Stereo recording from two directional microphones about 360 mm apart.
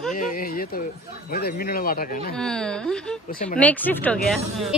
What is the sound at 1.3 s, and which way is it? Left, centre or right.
Speech, left.